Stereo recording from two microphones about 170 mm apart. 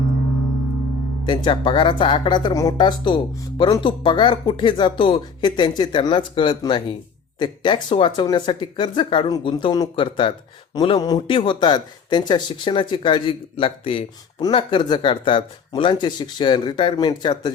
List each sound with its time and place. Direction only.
1.2 s speech: 25° left (ahead or behind)